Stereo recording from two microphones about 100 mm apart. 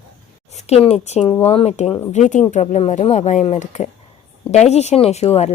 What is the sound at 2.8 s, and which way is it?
Speech, 90° left.